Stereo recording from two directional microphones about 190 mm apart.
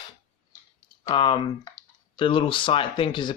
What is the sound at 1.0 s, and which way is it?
Speech, 25° left (ahead or behind).